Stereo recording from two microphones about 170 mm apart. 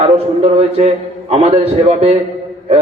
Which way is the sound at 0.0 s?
35° right (ahead or behind).